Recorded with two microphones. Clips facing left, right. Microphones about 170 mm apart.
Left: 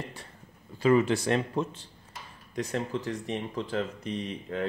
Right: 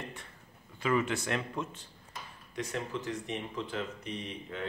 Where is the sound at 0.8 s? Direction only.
35° left (ahead or behind).